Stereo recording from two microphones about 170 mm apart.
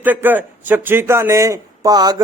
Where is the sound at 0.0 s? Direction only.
10° right (ahead or behind).